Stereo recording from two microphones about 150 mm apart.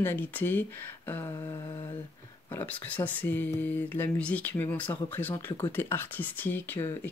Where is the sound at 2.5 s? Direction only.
10° left (ahead or behind).